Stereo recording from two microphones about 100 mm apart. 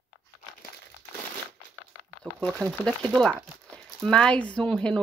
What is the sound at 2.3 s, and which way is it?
Speech, 15° right (ahead or behind).